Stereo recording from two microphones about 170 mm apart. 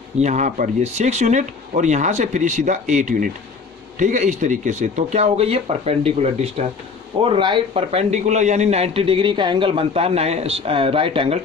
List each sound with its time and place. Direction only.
0.2 s speech: 45° right (ahead or behind)
7.2 s a man's voice: 30° right (ahead or behind)